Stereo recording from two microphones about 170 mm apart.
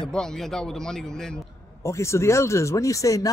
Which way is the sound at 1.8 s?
15° left (ahead or behind).